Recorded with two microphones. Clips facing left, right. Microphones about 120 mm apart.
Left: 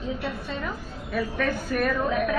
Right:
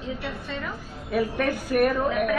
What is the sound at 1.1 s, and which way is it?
A woman's voice, 15° right (ahead or behind).